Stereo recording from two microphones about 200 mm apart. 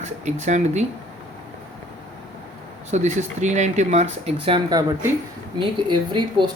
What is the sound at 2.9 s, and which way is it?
Speech, 35° right (ahead or behind).